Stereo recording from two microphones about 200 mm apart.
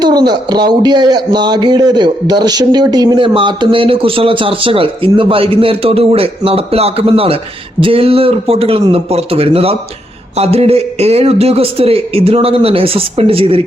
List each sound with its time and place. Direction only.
0.0 s speech: 20° right (ahead or behind)